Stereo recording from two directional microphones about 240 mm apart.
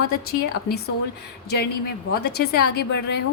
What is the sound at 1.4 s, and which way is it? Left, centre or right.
A woman's voice, left.